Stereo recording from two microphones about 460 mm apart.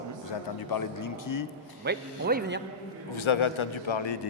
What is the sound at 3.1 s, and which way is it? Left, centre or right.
A man's voice, left.